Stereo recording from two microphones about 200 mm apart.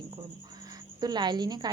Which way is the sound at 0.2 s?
20° right (ahead or behind).